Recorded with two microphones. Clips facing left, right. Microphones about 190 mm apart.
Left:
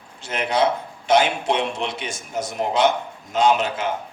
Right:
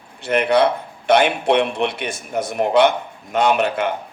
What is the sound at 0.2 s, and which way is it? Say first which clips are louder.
A man's voice: right 5 dB; 60° right (ahead or behind).